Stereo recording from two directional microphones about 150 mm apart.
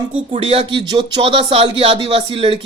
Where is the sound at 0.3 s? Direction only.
35° right (ahead or behind).